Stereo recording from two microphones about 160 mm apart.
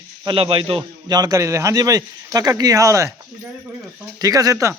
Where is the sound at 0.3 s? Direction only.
35° right (ahead or behind).